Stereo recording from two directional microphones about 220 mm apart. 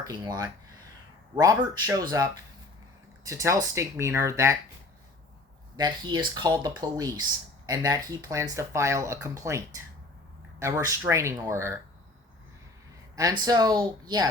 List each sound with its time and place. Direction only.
0.0 s speech: 15° right (ahead or behind)
5.7 s speech: 20° right (ahead or behind)
13.1 s speech: 15° right (ahead or behind)